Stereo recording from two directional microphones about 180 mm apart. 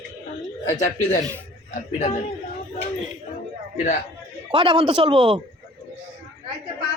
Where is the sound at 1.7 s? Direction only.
45° left (ahead or behind).